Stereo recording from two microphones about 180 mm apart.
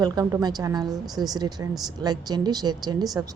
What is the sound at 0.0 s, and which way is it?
A woman's voice, 20° right (ahead or behind).